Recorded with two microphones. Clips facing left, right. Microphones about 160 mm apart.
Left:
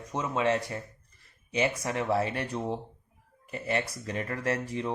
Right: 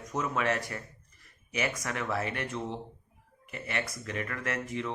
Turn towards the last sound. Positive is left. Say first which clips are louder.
# left 4 dB
turn(degrees=35)  # may be behind; listen again after turning